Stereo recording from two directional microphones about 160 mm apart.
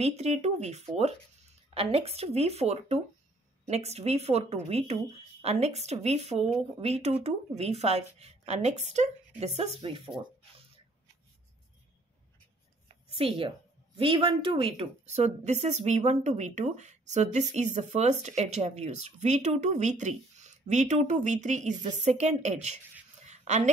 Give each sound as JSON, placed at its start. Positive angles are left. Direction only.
{"t": 0.0, "sound": "a woman's voice", "side_deg": -40}
{"t": 13.2, "sound": "a woman's voice", "side_deg": -35}
{"t": 23.2, "sound": "a sound", "side_deg": -45}